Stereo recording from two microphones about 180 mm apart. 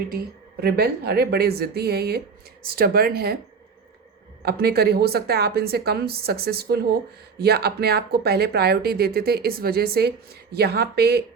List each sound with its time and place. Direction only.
0.1 s speech: 60° right (ahead or behind)
4.4 s speech: 60° right (ahead or behind)